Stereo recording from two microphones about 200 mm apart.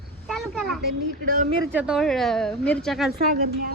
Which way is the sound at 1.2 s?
45° right (ahead or behind).